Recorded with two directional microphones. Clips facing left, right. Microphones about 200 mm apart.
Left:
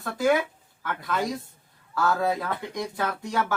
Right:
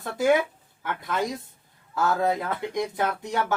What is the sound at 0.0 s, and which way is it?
Speech, 20° right (ahead or behind).